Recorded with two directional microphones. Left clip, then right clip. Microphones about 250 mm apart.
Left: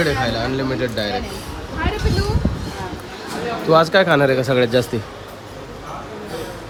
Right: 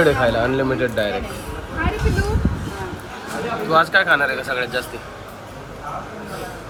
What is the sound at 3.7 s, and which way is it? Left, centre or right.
Speech, left.